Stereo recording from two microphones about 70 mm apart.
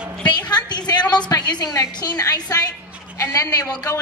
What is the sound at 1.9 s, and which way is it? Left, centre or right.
Speech, left.